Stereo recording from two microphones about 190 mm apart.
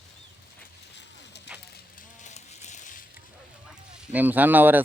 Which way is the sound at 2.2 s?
35° left (ahead or behind).